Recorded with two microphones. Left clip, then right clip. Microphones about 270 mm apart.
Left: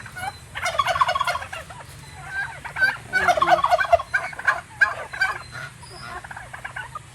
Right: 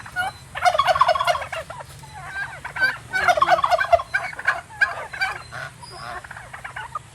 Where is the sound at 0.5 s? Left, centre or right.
Right.